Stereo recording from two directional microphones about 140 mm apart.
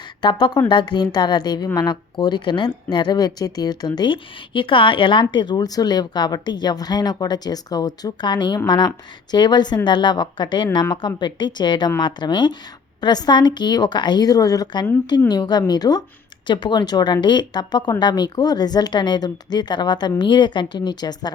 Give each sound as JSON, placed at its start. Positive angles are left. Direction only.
{"t": 0.2, "sound": "a woman's voice", "side_deg": 35}